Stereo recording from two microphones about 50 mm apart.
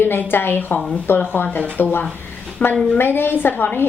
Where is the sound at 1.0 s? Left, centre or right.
Left.